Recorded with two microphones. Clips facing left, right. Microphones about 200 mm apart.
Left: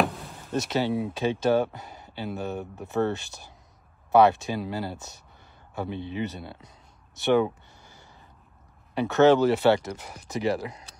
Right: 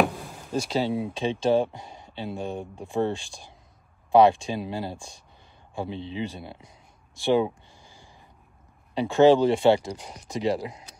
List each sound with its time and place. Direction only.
0.0 s a sound: centre (ahead or behind)
0.8 s speech: 25° right (ahead or behind)
2.6 s speech: 5° left (ahead or behind)
4.1 s speech: 25° right (ahead or behind)
7.3 s a sound: 15° right (ahead or behind)
8.9 s speech: 15° right (ahead or behind)